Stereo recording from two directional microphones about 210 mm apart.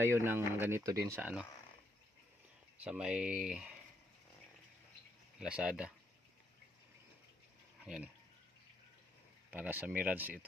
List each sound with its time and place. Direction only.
0.0 s speech: 10° right (ahead or behind)
2.7 s speech: 5° right (ahead or behind)
5.4 s speech: 5° right (ahead or behind)
7.9 s speech: 5° right (ahead or behind)
9.5 s speech: 10° right (ahead or behind)